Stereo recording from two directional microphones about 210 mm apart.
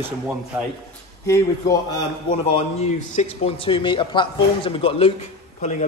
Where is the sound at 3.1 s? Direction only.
25° left (ahead or behind).